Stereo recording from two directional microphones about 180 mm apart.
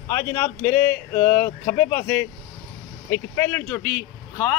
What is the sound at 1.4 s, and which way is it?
Speech, 55° left (ahead or behind).